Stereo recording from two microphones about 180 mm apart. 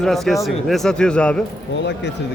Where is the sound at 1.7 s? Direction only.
75° left (ahead or behind).